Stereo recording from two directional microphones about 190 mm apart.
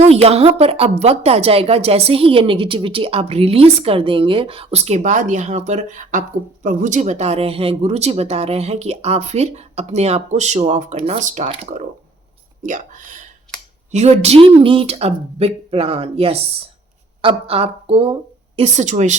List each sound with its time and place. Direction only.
0.0 s a woman's voice: 35° right (ahead or behind)